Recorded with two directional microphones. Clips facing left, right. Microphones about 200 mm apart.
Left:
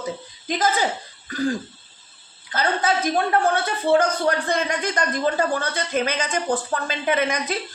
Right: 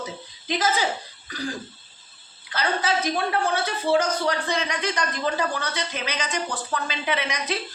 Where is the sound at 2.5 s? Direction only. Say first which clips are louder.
Left 3 dB; 50° left (ahead or behind).